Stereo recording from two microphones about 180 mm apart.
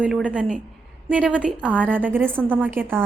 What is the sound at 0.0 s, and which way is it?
A woman's voice, 5° right (ahead or behind).